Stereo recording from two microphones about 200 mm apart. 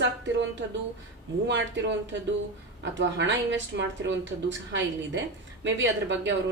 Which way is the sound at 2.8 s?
65° right (ahead or behind).